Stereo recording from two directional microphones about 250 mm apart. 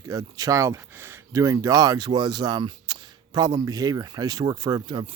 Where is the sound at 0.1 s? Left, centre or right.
Centre.